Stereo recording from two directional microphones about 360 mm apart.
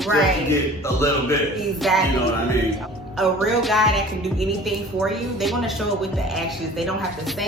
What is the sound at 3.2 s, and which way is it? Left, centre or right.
A woman's voice, centre.